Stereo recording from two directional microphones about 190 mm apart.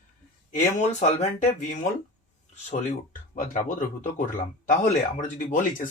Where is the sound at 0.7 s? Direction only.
35° left (ahead or behind).